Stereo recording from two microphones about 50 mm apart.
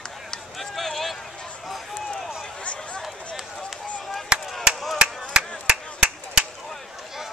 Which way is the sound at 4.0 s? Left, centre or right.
Centre.